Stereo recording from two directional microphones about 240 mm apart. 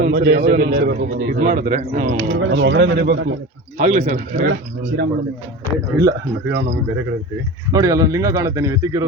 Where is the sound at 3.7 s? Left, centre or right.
Right.